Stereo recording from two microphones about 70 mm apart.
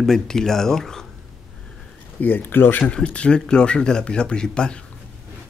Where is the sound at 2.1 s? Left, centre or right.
Left.